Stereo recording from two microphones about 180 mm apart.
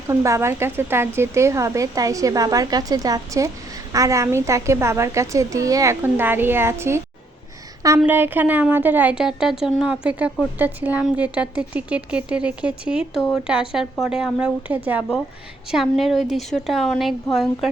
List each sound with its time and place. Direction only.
0.1 s a woman's voice: 15° right (ahead or behind); by 17.7 s centre (ahead or behind)